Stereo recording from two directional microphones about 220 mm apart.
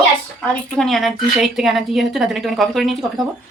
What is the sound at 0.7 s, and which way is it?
A woman's voice, centre (ahead or behind).